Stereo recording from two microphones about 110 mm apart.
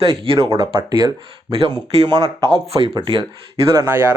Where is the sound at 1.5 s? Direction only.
60° right (ahead or behind).